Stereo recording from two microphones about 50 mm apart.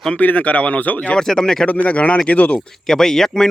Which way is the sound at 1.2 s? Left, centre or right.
Centre.